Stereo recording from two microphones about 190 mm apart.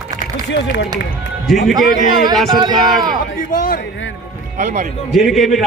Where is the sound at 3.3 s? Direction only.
45° left (ahead or behind).